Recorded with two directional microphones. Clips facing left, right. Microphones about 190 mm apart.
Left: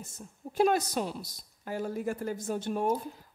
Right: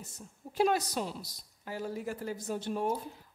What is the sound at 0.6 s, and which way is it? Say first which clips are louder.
A woman's voice: left 3 dB; 50° left (ahead or behind).